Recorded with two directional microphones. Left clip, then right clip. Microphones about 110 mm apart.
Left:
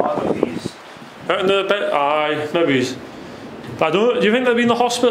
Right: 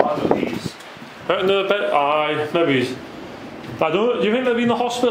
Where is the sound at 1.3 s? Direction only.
5° left (ahead or behind).